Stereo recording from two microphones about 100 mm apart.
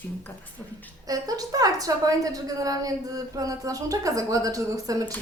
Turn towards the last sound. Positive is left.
turn(degrees=-35)  # may be behind; listen again after turning